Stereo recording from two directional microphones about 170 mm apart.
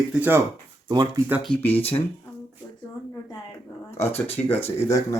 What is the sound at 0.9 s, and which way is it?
Speech, 25° right (ahead or behind).